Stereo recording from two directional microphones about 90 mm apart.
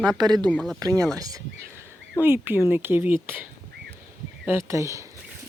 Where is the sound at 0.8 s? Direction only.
40° right (ahead or behind).